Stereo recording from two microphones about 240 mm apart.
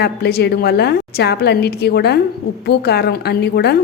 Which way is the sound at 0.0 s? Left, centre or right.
Left.